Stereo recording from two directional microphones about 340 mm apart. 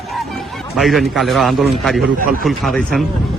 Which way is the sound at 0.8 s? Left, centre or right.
Centre.